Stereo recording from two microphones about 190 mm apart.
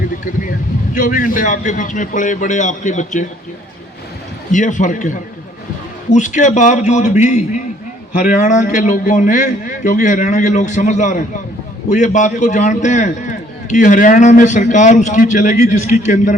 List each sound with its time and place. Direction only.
0.9 s a man's voice: 45° left (ahead or behind)
4.5 s a man's voice: 40° left (ahead or behind)